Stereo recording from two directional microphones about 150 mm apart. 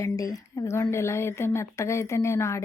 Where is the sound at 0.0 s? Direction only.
25° left (ahead or behind).